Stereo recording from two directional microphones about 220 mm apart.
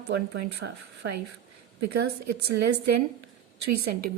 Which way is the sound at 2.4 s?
45° right (ahead or behind).